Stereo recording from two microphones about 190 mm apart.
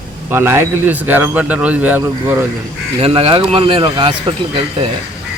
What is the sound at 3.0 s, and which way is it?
Speech, 30° right (ahead or behind).